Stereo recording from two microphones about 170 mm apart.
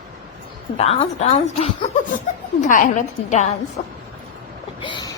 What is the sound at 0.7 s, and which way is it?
A woman's voice, 35° left (ahead or behind).